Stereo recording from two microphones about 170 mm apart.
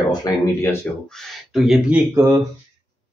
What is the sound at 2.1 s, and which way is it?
Speech, 15° right (ahead or behind).